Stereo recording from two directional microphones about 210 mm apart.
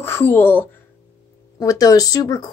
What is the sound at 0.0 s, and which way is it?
A woman's voice, 10° left (ahead or behind).